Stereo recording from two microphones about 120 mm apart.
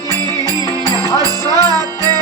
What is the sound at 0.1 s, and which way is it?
Music, 30° right (ahead or behind).